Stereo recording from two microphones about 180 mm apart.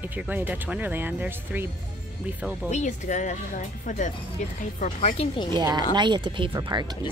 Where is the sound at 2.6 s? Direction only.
40° left (ahead or behind).